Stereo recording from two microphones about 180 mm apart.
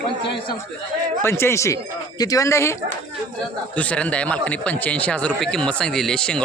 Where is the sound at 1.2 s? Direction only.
15° left (ahead or behind).